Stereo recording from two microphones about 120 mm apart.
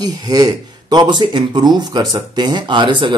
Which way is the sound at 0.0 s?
30° right (ahead or behind).